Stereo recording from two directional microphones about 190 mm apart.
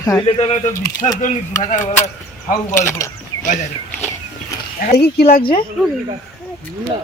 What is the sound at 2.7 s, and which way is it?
Mechanisms, 15° left (ahead or behind).